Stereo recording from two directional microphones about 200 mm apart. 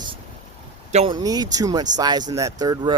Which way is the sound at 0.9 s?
25° right (ahead or behind).